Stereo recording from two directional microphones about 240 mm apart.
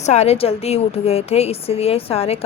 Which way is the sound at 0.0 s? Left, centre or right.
Left.